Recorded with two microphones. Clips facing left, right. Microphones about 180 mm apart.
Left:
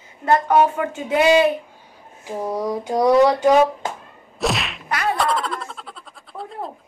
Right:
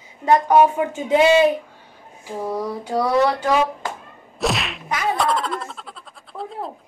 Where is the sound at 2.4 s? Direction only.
15° left (ahead or behind).